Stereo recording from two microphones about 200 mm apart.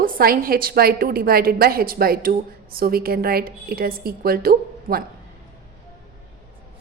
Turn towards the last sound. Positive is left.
turn(degrees=-50)  # may be behind; listen again after turning